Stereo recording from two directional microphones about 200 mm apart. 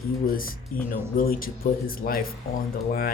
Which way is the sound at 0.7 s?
45° left (ahead or behind).